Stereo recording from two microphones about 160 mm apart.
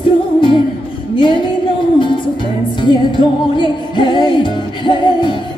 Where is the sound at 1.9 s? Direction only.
30° left (ahead or behind).